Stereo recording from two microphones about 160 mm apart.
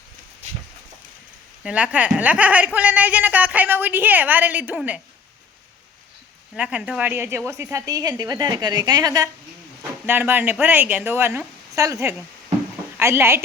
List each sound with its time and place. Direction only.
1.6 s speech: 10° right (ahead or behind)
6.6 s a woman's voice: 5° right (ahead or behind)